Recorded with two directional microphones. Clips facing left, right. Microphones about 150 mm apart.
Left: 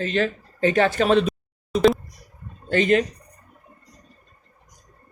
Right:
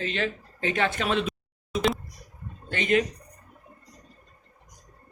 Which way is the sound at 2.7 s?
35° left (ahead or behind).